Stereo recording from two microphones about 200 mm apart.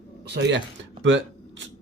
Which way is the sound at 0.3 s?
65° right (ahead or behind).